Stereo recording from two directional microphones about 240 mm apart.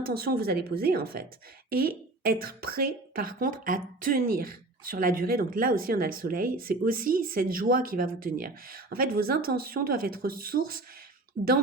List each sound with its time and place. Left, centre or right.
0.0 s a woman's voice: right